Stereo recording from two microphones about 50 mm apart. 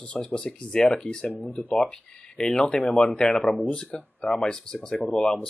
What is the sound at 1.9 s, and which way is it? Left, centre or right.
Speech, centre.